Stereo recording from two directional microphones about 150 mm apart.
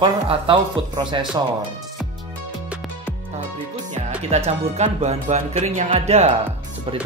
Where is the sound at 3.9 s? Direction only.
45° right (ahead or behind).